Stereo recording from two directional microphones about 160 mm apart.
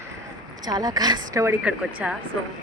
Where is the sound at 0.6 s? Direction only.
25° right (ahead or behind); by 2.2 s 5° right (ahead or behind).